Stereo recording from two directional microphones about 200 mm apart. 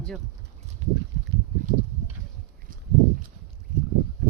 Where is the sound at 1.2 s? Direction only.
40° right (ahead or behind).